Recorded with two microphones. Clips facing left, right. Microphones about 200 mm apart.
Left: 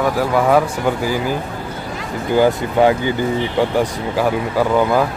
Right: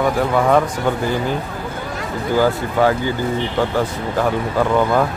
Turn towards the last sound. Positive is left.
turn(degrees=5)  # may be behind; listen again after turning